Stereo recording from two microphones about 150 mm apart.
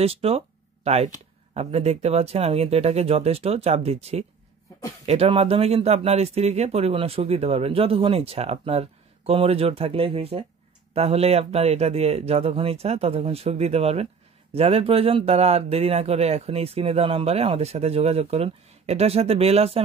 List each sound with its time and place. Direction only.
0.0 s speech: 40° right (ahead or behind)